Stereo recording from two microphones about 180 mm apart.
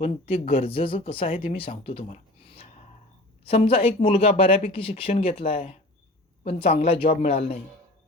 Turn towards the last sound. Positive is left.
turn(degrees=35)  # may be behind; listen again after turning